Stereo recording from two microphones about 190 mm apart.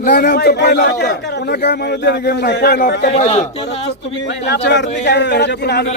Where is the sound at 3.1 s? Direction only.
30° left (ahead or behind).